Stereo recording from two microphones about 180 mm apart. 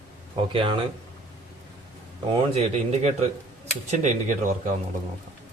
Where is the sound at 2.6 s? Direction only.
35° right (ahead or behind).